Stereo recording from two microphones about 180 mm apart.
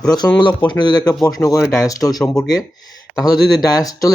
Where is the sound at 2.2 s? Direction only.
5° left (ahead or behind).